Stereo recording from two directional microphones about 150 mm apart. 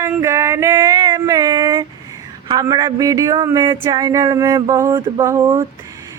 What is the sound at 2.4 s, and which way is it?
Speech, 25° right (ahead or behind).